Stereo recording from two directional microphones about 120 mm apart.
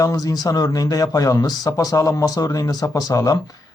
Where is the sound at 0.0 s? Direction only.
30° left (ahead or behind).